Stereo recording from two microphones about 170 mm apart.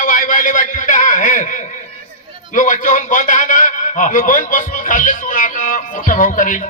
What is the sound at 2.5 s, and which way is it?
A man's voice, 50° left (ahead or behind).